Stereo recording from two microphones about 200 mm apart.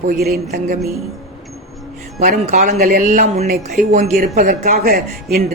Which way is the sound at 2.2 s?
40° right (ahead or behind).